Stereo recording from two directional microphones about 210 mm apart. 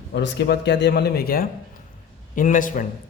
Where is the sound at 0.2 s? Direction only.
55° left (ahead or behind).